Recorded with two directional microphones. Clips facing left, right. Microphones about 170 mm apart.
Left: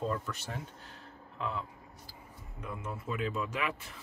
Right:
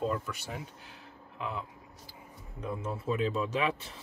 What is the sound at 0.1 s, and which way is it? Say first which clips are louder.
Speech: right 1 dB; 10° right (ahead or behind).